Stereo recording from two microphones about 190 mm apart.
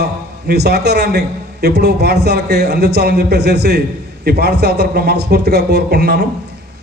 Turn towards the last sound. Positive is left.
turn(degrees=-60)  # may be behind; listen again after turning